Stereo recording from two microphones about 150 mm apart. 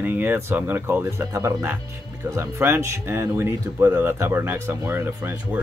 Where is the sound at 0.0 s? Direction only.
10° right (ahead or behind).